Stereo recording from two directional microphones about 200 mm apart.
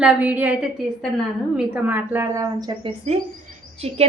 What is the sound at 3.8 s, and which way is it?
Speech, 30° right (ahead or behind).